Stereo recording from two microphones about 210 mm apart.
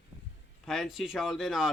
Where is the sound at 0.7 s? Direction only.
Centre (ahead or behind).